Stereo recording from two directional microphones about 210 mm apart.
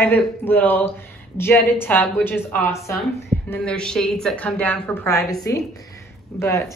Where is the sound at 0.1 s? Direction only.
10° left (ahead or behind).